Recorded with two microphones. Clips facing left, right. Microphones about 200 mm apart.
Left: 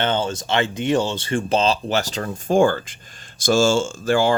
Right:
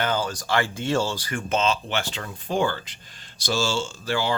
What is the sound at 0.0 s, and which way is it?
Speech, 25° left (ahead or behind).